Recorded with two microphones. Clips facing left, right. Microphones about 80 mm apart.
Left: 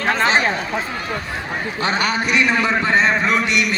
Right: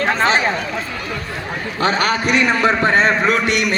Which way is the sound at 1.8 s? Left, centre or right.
Right.